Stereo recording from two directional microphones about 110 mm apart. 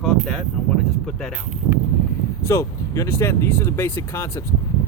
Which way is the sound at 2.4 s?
25° left (ahead or behind).